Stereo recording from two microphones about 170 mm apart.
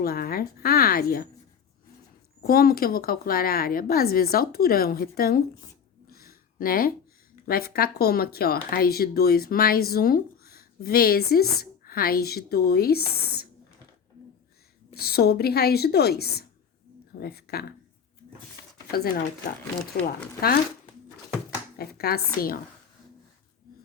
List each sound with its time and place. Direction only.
0.0 s speech: 65° left (ahead or behind)
2.4 s speech: 60° left (ahead or behind)
6.1 s a sound: 60° left (ahead or behind)
7.4 s speech: 65° left (ahead or behind)
14.9 s speech: 65° left (ahead or behind)
18.9 s speech: 60° left (ahead or behind)
21.8 s speech: 65° left (ahead or behind)